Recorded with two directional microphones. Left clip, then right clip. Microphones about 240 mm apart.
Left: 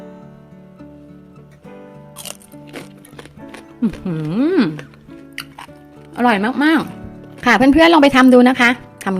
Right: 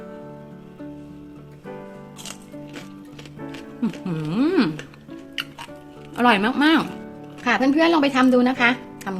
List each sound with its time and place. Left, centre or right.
3.8 s speech: left
5.4 s music: left
6.1 s speech: centre
7.4 s speech: left